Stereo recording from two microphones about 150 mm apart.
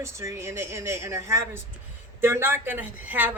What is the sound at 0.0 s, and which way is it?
A woman's voice, 20° right (ahead or behind).